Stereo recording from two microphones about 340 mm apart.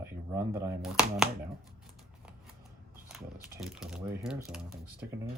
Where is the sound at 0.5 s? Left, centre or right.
Centre.